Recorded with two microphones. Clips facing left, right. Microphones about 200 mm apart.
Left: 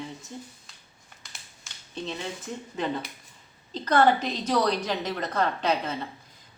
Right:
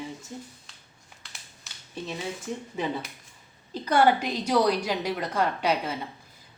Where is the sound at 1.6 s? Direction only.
10° right (ahead or behind).